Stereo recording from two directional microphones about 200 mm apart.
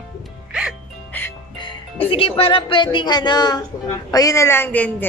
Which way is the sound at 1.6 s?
25° left (ahead or behind).